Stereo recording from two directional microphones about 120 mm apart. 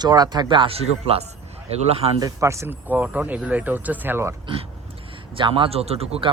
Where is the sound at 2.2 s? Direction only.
25° right (ahead or behind).